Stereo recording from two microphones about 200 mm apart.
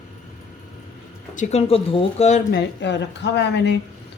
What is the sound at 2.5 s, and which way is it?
Speech, 55° left (ahead or behind).